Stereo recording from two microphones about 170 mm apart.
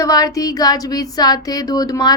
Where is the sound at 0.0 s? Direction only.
20° left (ahead or behind).